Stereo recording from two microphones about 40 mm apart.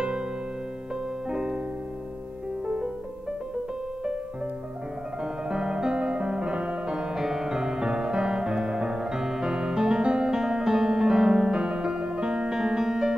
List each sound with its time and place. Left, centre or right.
1.3 s music: centre
5.2 s music: centre
5.9 s music: right
7.2 s music: centre